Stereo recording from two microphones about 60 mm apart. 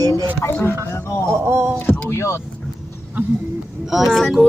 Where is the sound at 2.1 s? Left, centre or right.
Left.